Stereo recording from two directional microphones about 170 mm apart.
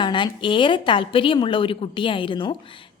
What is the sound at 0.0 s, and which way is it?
A woman's voice, 30° left (ahead or behind).